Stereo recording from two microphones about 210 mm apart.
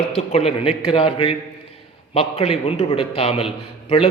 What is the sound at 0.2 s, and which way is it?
A man's voice, 30° left (ahead or behind).